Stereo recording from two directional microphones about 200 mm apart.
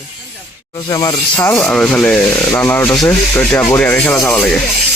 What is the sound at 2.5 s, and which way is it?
Rub, 10° left (ahead or behind).